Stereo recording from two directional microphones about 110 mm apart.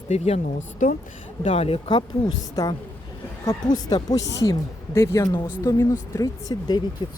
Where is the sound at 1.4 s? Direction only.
60° left (ahead or behind).